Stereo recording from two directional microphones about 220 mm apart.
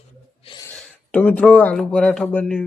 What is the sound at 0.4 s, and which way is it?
Gasp, 20° left (ahead or behind).